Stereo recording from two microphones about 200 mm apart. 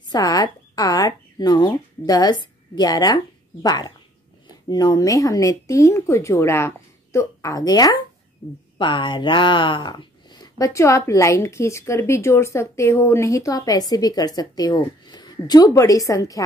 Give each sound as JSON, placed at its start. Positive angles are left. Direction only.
{"t": 0.1, "sound": "speech", "side_deg": 20}